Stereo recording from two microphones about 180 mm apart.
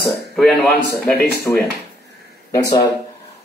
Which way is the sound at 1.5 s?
15° left (ahead or behind).